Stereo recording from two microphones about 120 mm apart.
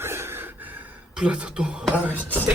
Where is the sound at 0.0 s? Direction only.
20° right (ahead or behind).